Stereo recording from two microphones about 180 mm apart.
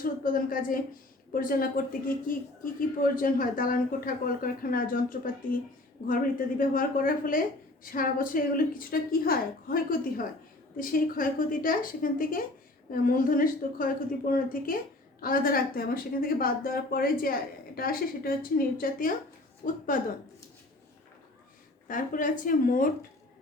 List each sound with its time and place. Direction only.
0.0 s a woman's voice: 50° left (ahead or behind)
6.6 s a woman's voice: 50° left (ahead or behind)
21.8 s a woman's voice: 50° left (ahead or behind)